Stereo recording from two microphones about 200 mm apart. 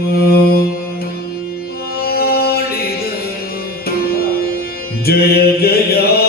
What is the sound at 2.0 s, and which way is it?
Music, 50° left (ahead or behind).